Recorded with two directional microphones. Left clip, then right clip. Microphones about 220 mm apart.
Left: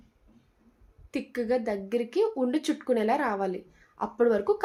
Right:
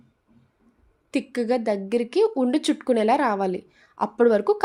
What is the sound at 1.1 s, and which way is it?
Speech, 45° right (ahead or behind).